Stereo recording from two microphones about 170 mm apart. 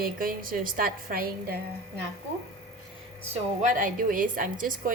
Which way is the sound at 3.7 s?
50° right (ahead or behind).